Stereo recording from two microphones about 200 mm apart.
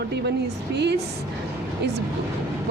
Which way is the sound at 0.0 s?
55° right (ahead or behind).